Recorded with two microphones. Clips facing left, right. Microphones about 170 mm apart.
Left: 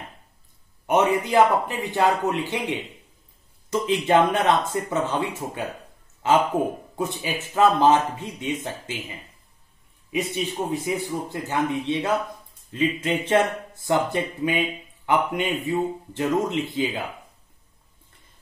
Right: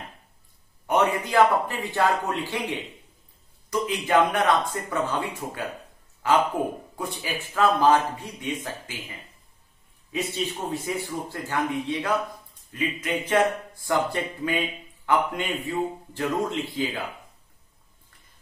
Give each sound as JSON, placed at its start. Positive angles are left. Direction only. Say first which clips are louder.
{"t": 0.8, "sound": "speech", "louder": "left 3 dB", "side_deg": 20}
{"t": 3.8, "sound": "speech", "louder": "left 3 dB", "side_deg": 25}
{"t": 10.1, "sound": "a man's voice", "louder": "left 3 dB", "side_deg": 15}